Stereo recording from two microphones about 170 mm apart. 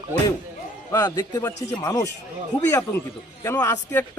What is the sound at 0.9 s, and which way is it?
Speech, 20° left (ahead or behind).